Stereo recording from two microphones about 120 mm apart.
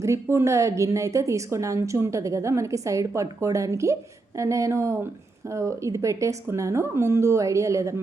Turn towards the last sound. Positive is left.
turn(degrees=-25)  # may be behind; listen again after turning